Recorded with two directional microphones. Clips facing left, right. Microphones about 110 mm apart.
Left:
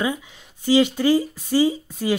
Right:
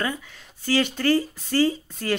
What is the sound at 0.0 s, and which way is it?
Speech, 15° left (ahead or behind).